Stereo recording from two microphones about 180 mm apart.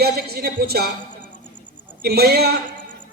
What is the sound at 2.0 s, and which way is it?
Speech, 60° right (ahead or behind).